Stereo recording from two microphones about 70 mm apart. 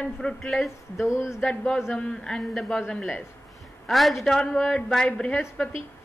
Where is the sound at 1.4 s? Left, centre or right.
Centre.